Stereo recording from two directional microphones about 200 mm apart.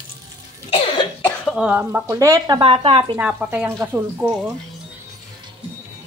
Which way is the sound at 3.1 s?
10° right (ahead or behind).